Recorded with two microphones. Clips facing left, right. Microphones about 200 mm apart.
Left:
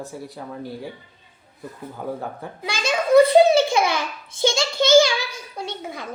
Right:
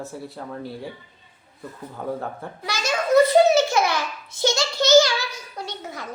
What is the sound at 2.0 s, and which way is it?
Speech, 5° left (ahead or behind).